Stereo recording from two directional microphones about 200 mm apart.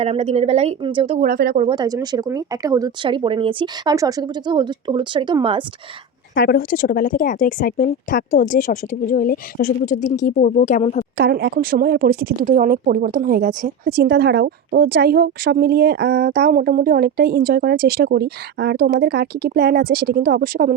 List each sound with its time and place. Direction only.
0.0 s a woman's voice: 30° right (ahead or behind)
1.3 s speech: 50° right (ahead or behind)
1.5 s speech: 25° right (ahead or behind)
6.3 s a woman's voice: 55° left (ahead or behind); by 11.0 s 40° left (ahead or behind)
11.2 s speech: 55° right (ahead or behind)